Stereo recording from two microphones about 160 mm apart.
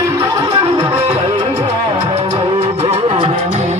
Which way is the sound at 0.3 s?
25° right (ahead or behind).